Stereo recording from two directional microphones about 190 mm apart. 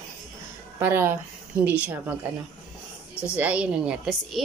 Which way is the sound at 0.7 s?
10° right (ahead or behind).